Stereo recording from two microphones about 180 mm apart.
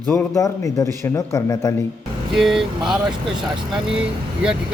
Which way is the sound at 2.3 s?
Centre (ahead or behind).